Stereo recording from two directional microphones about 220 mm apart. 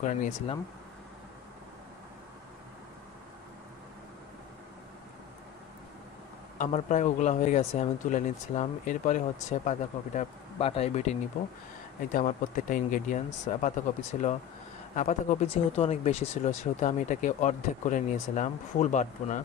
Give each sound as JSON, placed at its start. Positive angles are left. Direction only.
{"t": 0.0, "sound": "speech", "side_deg": 30}
{"t": 6.6, "sound": "speech", "side_deg": 35}
{"t": 11.4, "sound": "speech", "side_deg": 40}